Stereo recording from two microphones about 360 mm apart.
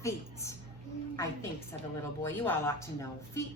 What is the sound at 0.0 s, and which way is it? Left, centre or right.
A woman's voice, centre.